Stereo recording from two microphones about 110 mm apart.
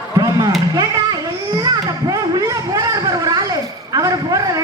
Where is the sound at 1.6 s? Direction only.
35° right (ahead or behind).